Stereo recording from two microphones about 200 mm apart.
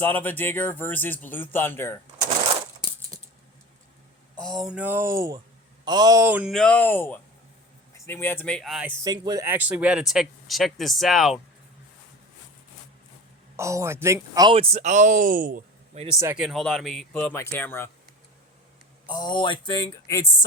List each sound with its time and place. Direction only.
0.0 s speech: 10° left (ahead or behind)
4.4 s speech: centre (ahead or behind)
9.0 s speech: 20° right (ahead or behind); by 11.3 s centre (ahead or behind)
13.6 s speech: 15° right (ahead or behind); by 16.0 s 45° right (ahead or behind)
16.2 s speech: 5° right (ahead or behind); by 17.8 s 10° left (ahead or behind)
19.1 s speech: 20° left (ahead or behind)